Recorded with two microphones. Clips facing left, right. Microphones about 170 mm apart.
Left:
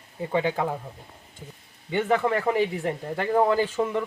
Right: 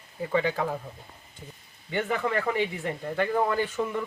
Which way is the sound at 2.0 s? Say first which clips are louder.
Left 5 dB; 35° left (ahead or behind).